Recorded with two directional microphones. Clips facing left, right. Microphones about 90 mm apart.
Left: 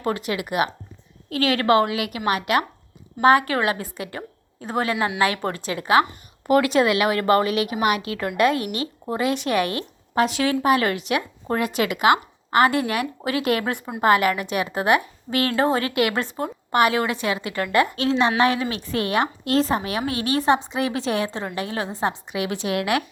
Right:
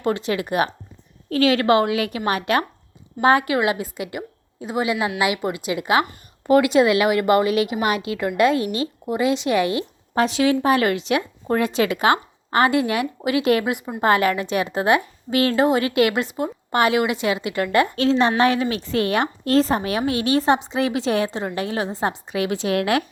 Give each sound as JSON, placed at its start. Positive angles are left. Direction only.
{"t": 0.0, "sound": "a woman's voice", "side_deg": -30}
{"t": 17.8, "sound": "a woman's voice", "side_deg": 30}
{"t": 18.2, "sound": "a woman's voice", "side_deg": -30}
{"t": 18.7, "sound": "a woman's voice", "side_deg": 35}
{"t": 19.2, "sound": "a woman's voice", "side_deg": -35}
{"t": 20.1, "sound": "a woman's voice", "side_deg": 35}
{"t": 20.4, "sound": "a woman's voice", "side_deg": -30}